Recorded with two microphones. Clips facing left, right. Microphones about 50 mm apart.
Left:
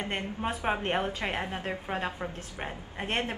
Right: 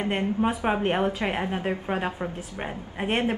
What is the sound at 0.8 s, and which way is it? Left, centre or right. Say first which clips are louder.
A woman's voice: right 5 dB; centre.